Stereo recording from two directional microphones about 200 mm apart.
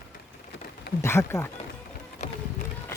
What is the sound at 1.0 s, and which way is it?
Speech, 15° left (ahead or behind).